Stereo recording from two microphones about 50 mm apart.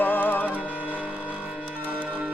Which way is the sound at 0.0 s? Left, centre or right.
Left.